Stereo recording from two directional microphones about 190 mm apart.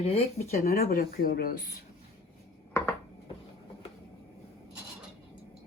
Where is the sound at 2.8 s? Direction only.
15° left (ahead or behind).